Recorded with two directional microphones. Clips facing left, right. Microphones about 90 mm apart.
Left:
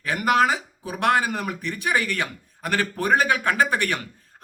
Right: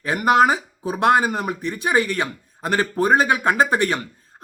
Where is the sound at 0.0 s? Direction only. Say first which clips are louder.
Right 4 dB; 25° right (ahead or behind).